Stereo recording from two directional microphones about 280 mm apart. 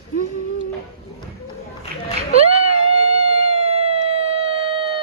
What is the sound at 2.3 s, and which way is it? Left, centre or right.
Cat, right.